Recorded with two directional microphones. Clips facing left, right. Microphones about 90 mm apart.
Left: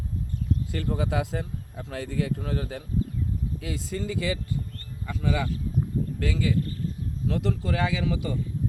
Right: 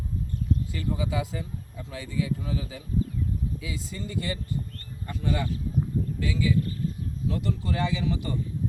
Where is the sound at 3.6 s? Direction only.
70° left (ahead or behind); by 4.3 s 90° left.